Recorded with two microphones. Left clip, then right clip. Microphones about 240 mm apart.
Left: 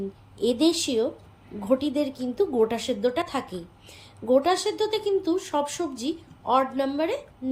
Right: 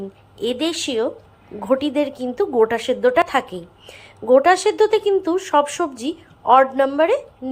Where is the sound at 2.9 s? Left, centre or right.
Right.